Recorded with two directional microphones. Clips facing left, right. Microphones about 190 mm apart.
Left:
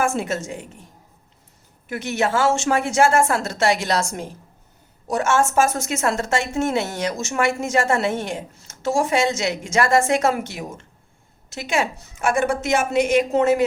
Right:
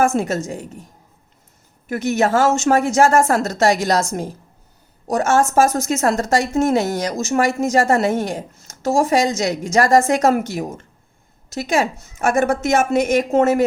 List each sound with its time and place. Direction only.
0.0 s speech: 40° right (ahead or behind)
1.9 s speech: 45° right (ahead or behind)
5.0 s a woman's voice: 40° right (ahead or behind)